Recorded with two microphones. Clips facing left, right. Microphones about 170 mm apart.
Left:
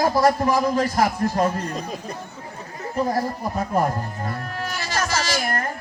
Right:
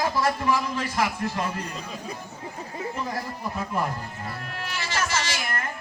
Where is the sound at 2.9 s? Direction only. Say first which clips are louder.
Left 14 dB; 40° left (ahead or behind).